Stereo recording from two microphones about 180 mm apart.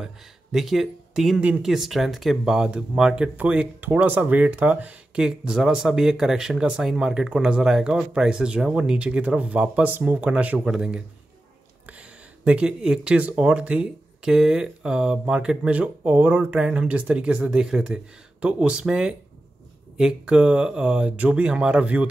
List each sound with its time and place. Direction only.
0.0 s speech: centre (ahead or behind)